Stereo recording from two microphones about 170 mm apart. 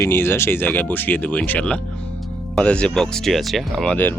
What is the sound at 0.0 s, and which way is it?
Speech, 15° left (ahead or behind).